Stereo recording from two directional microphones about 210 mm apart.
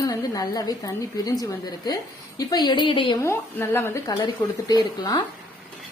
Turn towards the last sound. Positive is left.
turn(degrees=20)  # may be behind; listen again after turning